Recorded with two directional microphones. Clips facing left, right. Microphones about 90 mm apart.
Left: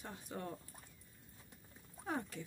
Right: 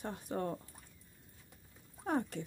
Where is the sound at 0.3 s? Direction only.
40° right (ahead or behind).